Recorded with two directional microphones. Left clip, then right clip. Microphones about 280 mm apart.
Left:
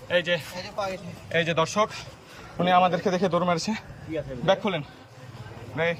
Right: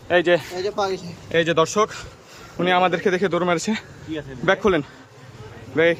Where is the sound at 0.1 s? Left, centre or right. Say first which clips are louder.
Right 7 dB; centre.